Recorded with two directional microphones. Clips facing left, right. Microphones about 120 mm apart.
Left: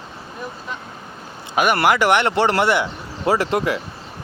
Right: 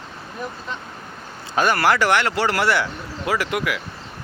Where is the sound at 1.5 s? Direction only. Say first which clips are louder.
Left 1 dB; 15° left (ahead or behind).